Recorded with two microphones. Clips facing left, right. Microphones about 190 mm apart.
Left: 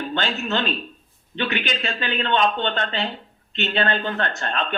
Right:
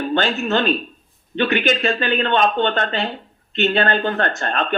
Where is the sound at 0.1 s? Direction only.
50° right (ahead or behind).